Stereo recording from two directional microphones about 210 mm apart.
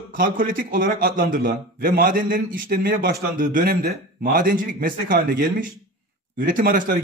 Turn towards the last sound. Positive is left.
turn(degrees=-40)  # may be behind; listen again after turning